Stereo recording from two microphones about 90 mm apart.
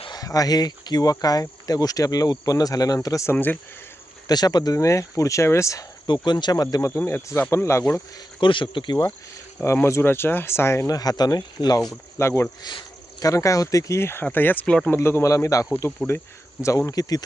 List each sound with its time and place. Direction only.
0.1 s speech: 45° left (ahead or behind)
3.3 s speech: 20° left (ahead or behind)
4.3 s speech: 50° left (ahead or behind); by 5.8 s 35° left (ahead or behind)
6.2 s speech: 55° left (ahead or behind); by 8.0 s 35° left (ahead or behind)
8.4 s speech: 65° left (ahead or behind)
9.8 s speech: 25° left (ahead or behind)
10.8 s speech: 45° left (ahead or behind)
12.2 s speech: 30° left (ahead or behind)
12.6 s speech: 50° left (ahead or behind)